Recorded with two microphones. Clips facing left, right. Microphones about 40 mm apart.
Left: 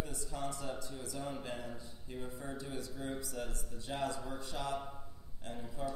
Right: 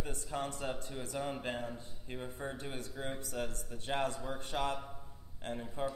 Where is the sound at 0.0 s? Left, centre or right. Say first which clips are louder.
Right 2 dB; right.